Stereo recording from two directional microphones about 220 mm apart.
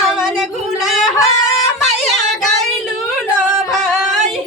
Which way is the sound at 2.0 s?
Centre (ahead or behind).